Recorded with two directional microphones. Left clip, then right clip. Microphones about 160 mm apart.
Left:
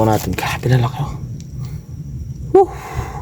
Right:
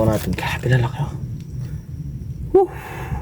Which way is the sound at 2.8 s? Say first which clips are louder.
Left 3 dB; 20° left (ahead or behind).